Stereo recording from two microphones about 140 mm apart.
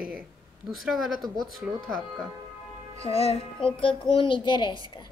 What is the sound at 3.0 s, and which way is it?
Speech, 45° left (ahead or behind).